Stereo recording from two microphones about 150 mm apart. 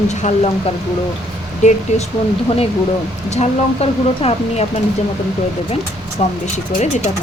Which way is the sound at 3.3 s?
45° left (ahead or behind).